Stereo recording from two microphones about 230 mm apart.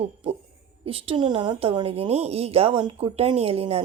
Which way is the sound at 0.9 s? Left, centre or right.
Right.